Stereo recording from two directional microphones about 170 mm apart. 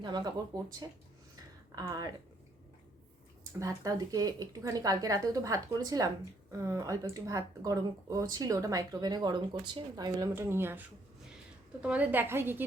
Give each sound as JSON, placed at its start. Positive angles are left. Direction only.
{"t": 0.0, "sound": "speech", "side_deg": -25}
{"t": 3.6, "sound": "a woman's voice", "side_deg": -20}